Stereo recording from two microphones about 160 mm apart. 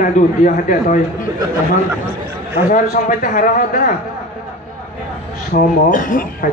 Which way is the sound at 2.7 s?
50° left (ahead or behind).